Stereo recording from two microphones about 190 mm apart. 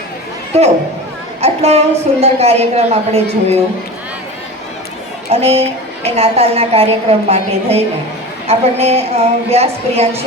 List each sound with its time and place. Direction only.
0.5 s a woman's voice: 35° right (ahead or behind)
5.3 s a woman's voice: 35° right (ahead or behind)